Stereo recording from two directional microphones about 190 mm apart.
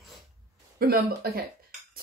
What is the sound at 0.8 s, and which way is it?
Speech, 55° right (ahead or behind).